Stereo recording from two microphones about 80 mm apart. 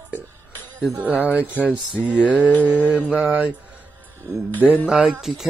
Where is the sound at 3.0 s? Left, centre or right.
Right.